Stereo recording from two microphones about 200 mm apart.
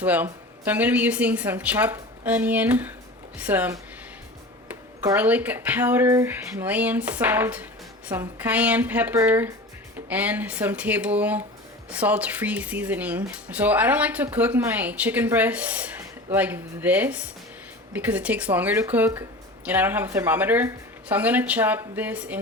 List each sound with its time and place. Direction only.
0.0 s speech: 10° right (ahead or behind)
5.0 s speech: 10° right (ahead or behind)